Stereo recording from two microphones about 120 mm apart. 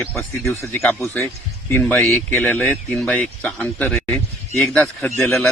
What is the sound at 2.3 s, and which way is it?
Speech, 15° left (ahead or behind).